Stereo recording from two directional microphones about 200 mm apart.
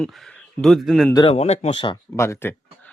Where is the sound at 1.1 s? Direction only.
25° left (ahead or behind).